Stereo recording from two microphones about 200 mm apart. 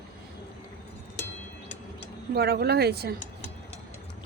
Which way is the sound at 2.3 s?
50° right (ahead or behind).